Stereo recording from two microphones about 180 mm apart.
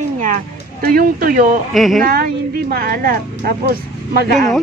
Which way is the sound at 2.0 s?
55° right (ahead or behind).